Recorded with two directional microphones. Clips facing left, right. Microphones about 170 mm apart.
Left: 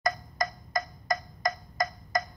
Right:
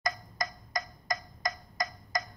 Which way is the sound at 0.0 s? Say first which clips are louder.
Left 5 dB; 55° left (ahead or behind).